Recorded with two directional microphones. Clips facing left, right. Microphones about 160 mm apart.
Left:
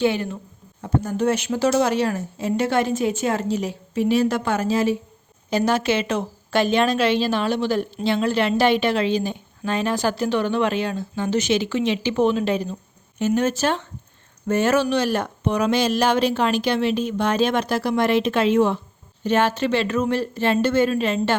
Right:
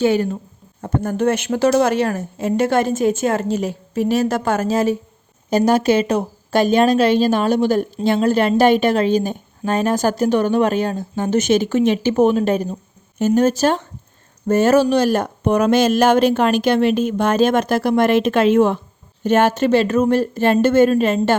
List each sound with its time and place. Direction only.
0.0 s speech: 40° right (ahead or behind)
0.8 s a woman's voice: 50° right (ahead or behind)